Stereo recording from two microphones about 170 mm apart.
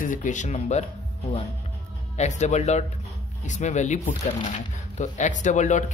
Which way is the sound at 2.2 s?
45° left (ahead or behind).